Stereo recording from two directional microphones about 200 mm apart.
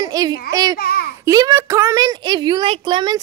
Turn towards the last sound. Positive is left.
turn(degrees=-20)  # may be behind; listen again after turning